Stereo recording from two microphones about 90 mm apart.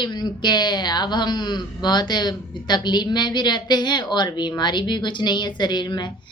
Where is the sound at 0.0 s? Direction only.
55° left (ahead or behind).